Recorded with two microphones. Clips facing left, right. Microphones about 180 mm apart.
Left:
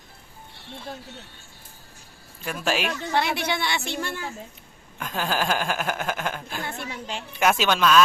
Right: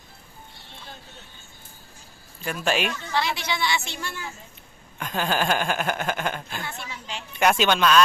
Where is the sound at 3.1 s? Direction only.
55° left (ahead or behind).